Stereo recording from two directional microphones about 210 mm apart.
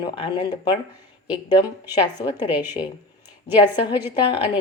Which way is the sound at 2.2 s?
20° left (ahead or behind).